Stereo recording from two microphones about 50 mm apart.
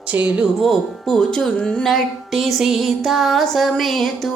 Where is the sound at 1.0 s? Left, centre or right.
Centre.